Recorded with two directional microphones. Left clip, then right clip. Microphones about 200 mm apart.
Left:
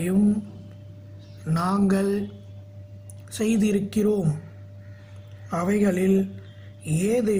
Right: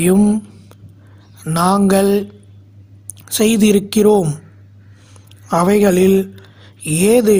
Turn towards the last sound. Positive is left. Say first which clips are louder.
# right 12 dB
turn(degrees=-60)  # may be behind; listen again after turning